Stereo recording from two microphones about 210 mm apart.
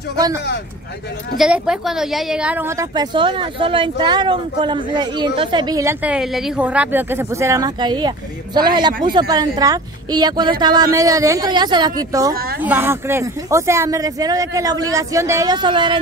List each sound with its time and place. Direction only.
1.4 s a woman's voice: centre (ahead or behind); by 16.0 s 25° right (ahead or behind)